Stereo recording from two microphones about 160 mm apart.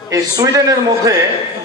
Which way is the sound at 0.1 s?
20° right (ahead or behind).